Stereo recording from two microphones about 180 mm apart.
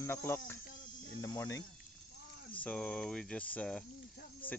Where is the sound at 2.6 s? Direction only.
5° left (ahead or behind).